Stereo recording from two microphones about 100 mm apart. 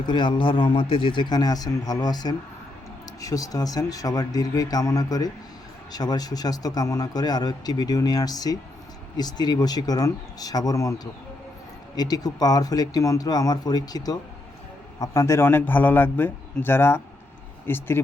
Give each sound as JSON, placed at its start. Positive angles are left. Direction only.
{"t": 0.0, "sound": "speech", "side_deg": 50}
{"t": 0.8, "sound": "speech", "side_deg": 65}
{"t": 15.4, "sound": "speech", "side_deg": 20}